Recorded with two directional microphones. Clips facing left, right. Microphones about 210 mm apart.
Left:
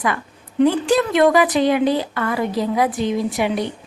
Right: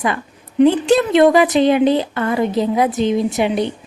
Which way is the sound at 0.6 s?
25° right (ahead or behind).